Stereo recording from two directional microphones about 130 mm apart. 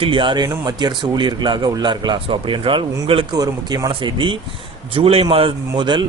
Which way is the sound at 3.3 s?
30° right (ahead or behind).